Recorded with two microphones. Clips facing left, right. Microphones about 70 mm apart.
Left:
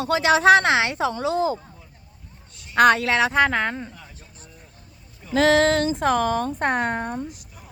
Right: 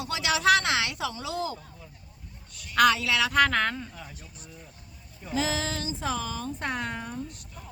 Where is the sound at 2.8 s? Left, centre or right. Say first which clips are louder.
Left 9 dB; left.